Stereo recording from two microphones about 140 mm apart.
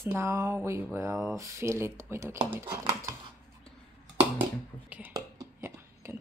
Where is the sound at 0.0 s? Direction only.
15° right (ahead or behind).